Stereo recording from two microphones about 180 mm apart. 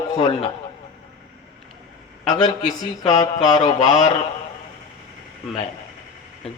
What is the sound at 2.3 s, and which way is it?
A man's voice, 20° left (ahead or behind).